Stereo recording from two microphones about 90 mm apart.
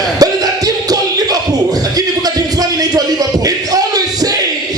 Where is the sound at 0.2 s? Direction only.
45° right (ahead or behind).